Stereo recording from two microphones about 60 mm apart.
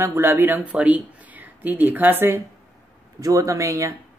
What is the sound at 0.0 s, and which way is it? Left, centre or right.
Speech, right.